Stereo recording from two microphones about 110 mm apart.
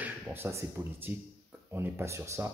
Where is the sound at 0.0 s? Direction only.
20° right (ahead or behind).